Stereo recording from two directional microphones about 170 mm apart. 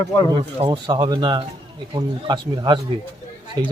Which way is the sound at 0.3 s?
30° right (ahead or behind).